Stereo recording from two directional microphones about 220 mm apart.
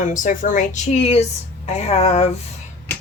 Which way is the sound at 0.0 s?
35° left (ahead or behind).